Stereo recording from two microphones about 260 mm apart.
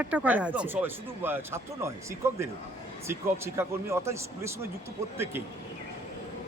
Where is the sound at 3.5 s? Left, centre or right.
Centre.